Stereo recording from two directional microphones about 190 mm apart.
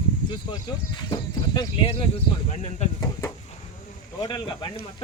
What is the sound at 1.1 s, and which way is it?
Speech, 20° left (ahead or behind).